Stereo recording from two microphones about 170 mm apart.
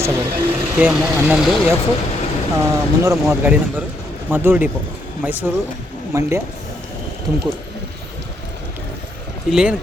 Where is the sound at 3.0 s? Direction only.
15° right (ahead or behind).